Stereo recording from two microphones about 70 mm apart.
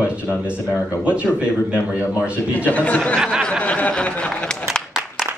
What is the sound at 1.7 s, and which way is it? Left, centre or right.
Speech, centre.